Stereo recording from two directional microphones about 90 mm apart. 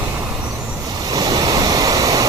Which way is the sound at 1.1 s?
50° right (ahead or behind).